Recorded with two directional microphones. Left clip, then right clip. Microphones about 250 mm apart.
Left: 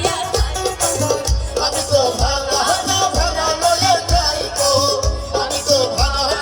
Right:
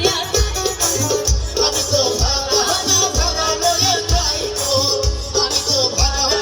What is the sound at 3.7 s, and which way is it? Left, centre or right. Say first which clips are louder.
Music: left 2 dB; centre.